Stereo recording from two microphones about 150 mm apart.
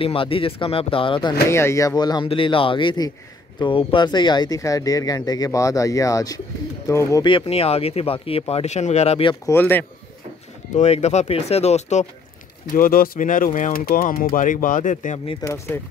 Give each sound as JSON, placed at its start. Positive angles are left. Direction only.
{"t": 0.0, "sound": "speech", "side_deg": 35}
{"t": 1.5, "sound": "speech", "side_deg": 20}
{"t": 7.2, "sound": "speech", "side_deg": 40}
{"t": 9.5, "sound": "speech", "side_deg": 15}
{"t": 10.7, "sound": "speech", "side_deg": 45}
{"t": 12.7, "sound": "speech", "side_deg": 70}
{"t": 15.4, "sound": "speech", "side_deg": 20}